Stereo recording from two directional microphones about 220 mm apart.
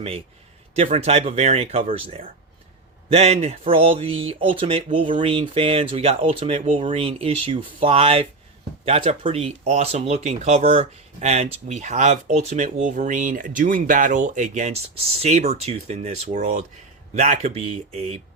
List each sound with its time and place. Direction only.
0.8 s speech: 25° right (ahead or behind)